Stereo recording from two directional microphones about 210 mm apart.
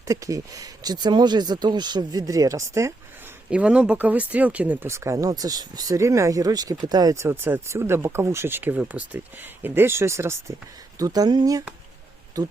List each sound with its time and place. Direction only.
0.1 s speech: 15° right (ahead or behind)